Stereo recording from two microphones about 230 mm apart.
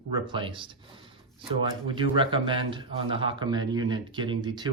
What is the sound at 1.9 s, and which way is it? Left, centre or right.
Speech, right.